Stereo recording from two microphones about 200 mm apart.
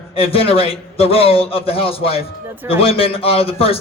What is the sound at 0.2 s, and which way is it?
Speech, 30° left (ahead or behind).